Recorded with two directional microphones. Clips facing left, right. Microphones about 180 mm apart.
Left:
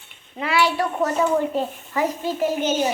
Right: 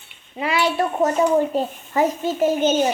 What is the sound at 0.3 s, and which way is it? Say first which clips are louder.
A child's voice: right 1 dB; 15° right (ahead or behind).